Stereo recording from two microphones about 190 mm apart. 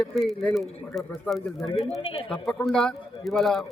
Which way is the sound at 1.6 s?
30° left (ahead or behind).